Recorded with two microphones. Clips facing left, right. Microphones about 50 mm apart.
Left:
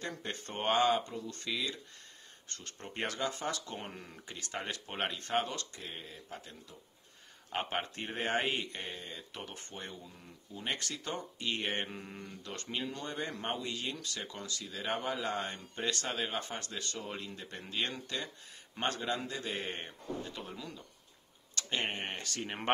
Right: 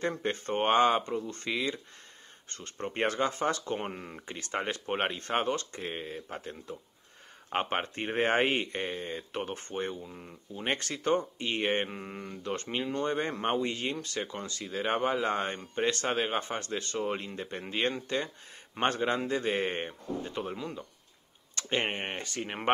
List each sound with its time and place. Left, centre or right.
0.0 s speech: right
22.4 s speech: centre